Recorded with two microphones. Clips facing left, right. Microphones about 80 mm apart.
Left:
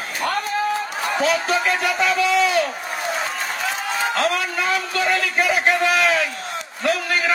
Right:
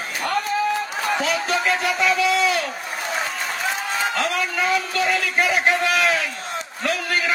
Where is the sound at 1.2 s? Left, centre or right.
Left.